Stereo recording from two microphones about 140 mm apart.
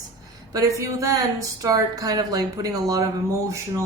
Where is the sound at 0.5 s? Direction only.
25° right (ahead or behind).